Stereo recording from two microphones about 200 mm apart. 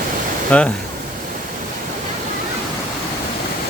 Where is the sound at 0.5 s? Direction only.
5° left (ahead or behind).